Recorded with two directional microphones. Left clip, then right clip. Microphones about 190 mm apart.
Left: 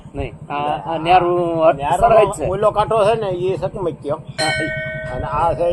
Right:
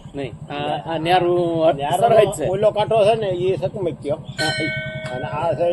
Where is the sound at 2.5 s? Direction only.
15° left (ahead or behind).